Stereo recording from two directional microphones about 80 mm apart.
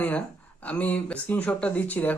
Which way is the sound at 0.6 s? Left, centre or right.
Centre.